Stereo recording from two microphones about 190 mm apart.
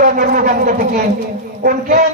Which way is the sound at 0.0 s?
45° right (ahead or behind).